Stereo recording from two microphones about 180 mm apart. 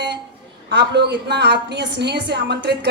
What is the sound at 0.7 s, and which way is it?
A woman's voice, 70° right (ahead or behind).